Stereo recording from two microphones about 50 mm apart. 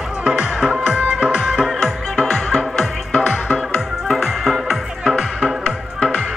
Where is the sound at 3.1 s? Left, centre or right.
Left.